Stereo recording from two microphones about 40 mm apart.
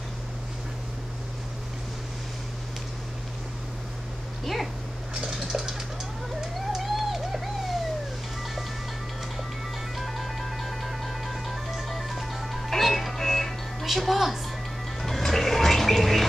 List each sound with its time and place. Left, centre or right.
5.1 s a sound: centre
6.7 s owl: centre
9.9 s music: centre
13.8 s a woman's voice: centre
15.0 s music: centre